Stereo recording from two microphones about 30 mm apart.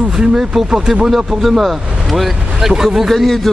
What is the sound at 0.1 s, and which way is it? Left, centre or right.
Speech, right.